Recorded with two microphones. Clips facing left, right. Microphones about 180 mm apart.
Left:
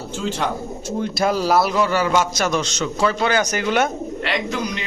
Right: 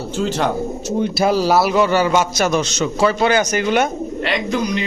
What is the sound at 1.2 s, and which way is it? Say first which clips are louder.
Speech: right 3 dB; 30° right (ahead or behind).